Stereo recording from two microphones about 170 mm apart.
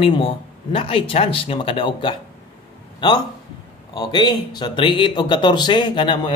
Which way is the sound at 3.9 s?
25° left (ahead or behind).